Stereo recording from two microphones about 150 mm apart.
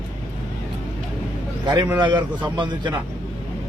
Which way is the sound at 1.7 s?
20° right (ahead or behind).